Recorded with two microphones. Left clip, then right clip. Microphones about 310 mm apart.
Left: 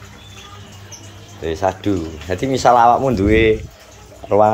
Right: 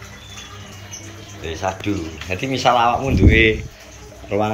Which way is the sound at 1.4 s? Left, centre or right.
Left.